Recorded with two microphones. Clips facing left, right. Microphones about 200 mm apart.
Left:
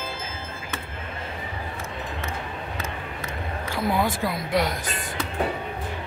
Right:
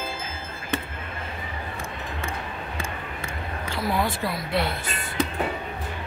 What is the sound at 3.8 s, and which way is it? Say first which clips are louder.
Speech: left 2 dB; 20° left (ahead or behind).